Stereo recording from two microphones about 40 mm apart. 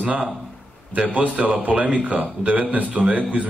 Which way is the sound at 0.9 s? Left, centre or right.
Right.